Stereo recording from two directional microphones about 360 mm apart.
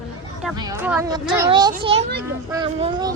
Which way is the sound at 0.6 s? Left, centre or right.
Centre.